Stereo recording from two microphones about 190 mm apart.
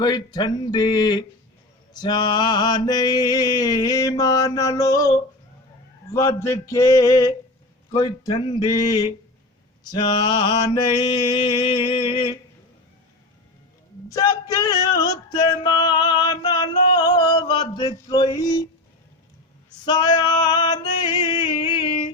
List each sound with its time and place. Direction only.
0.0 s mantra: 20° left (ahead or behind)
6.1 s a sound: 15° left (ahead or behind)
7.9 s mantra: 20° left (ahead or behind)
14.1 s music: 20° left (ahead or behind)
19.8 s music: 20° left (ahead or behind)